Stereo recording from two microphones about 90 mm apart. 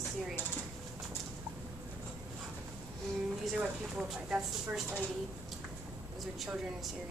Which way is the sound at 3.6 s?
10° right (ahead or behind).